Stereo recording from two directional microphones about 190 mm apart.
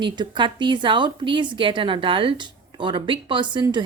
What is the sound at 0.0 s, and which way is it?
A woman's voice, 25° right (ahead or behind).